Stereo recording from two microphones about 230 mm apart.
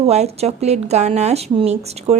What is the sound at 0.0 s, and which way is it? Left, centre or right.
A woman's voice, right.